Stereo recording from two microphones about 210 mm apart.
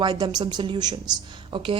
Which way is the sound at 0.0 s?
20° right (ahead or behind).